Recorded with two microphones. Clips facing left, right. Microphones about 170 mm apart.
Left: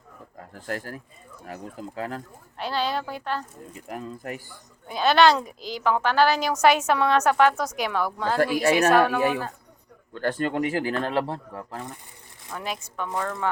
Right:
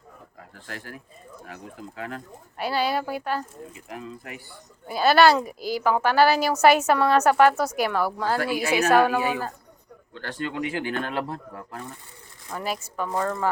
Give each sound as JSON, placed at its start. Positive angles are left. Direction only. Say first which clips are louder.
{"t": 0.3, "sound": "speech", "louder": "left 8 dB", "side_deg": 45}
{"t": 2.0, "sound": "speech", "louder": "left 3 dB", "side_deg": 35}
{"t": 2.6, "sound": "a woman's voice", "louder": "right 2 dB", "side_deg": -10}
{"t": 3.7, "sound": "speech", "louder": "left 2 dB", "side_deg": 45}
{"t": 4.9, "sound": "a woman's voice", "louder": "right 1 dB", "side_deg": -5}
{"t": 10.2, "sound": "speech", "louder": "left 5 dB", "side_deg": 50}
{"t": 12.5, "sound": "a woman's voice", "louder": "right 3 dB", "side_deg": -5}